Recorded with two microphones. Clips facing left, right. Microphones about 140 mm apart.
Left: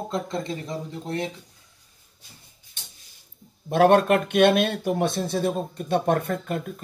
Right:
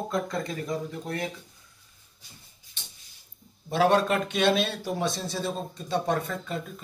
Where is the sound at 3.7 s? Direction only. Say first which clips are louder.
Left 5 dB; 55° left (ahead or behind).